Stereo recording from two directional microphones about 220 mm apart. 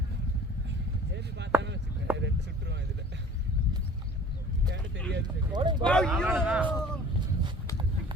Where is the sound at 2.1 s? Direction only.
55° right (ahead or behind).